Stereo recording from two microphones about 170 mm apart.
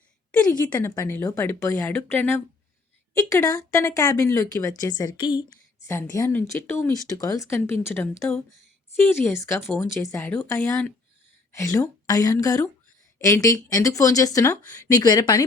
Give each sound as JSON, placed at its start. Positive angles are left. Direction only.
{"t": 0.6, "sound": "speech", "side_deg": 15}
{"t": 5.9, "sound": "speech", "side_deg": 15}